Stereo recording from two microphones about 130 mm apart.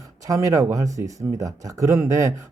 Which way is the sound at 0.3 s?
25° right (ahead or behind).